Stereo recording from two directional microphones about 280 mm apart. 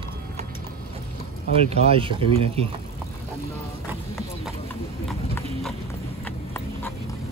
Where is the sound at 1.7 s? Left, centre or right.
Centre.